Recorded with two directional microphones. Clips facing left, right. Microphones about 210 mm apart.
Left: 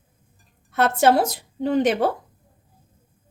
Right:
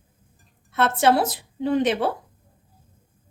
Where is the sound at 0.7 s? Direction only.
45° left (ahead or behind).